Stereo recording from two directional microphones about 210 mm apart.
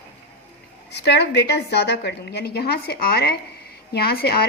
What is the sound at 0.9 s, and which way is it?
A woman's voice, 50° left (ahead or behind).